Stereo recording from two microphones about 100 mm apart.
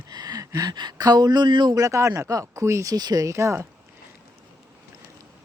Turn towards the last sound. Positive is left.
turn(degrees=-30)  # may be behind; listen again after turning